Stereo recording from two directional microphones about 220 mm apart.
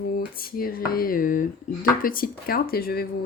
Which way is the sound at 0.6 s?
40° left (ahead or behind).